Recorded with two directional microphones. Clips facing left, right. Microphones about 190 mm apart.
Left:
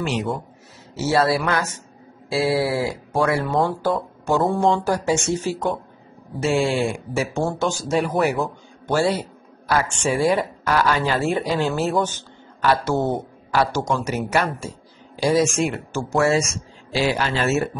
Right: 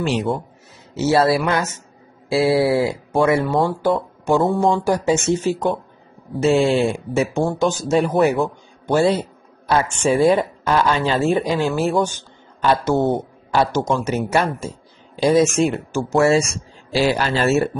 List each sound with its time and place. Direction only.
0.9 s speech: 20° right (ahead or behind)
3.4 s speech: centre (ahead or behind)
4.8 s speech: 20° right (ahead or behind)
16.9 s speech: 40° right (ahead or behind)